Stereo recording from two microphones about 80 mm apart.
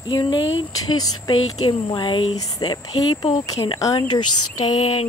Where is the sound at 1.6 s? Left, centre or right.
Left.